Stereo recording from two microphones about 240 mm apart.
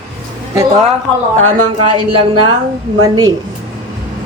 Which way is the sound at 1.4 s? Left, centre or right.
Right.